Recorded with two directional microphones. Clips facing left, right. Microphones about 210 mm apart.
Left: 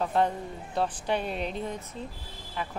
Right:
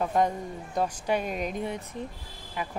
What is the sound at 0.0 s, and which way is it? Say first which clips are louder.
A woman's voice: right 1 dB; 10° right (ahead or behind).